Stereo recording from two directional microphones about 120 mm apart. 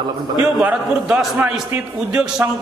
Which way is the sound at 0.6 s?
10° right (ahead or behind).